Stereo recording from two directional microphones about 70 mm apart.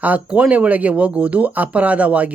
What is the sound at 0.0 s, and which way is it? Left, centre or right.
Speech, right.